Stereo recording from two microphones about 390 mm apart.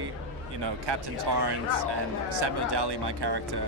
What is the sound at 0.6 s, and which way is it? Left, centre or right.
Speech, right.